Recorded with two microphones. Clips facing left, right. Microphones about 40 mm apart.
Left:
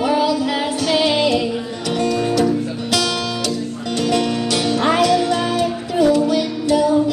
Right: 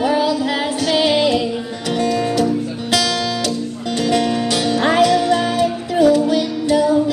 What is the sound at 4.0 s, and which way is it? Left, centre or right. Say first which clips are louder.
Music: right 1 dB; right.